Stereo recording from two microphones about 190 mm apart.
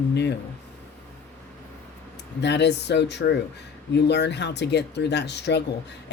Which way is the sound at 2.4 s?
65° left (ahead or behind).